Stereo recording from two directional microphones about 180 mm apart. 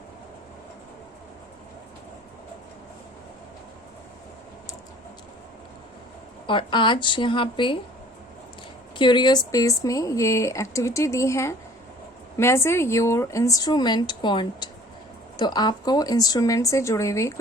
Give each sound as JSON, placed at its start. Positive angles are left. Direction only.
{"t": 6.5, "sound": "a woman's voice", "side_deg": 25}
{"t": 9.0, "sound": "a woman's voice", "side_deg": 25}